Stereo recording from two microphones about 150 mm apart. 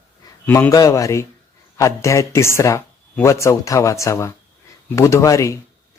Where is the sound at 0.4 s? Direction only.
15° left (ahead or behind).